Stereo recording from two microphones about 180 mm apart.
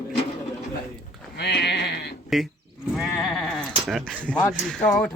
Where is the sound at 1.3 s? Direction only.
70° left (ahead or behind).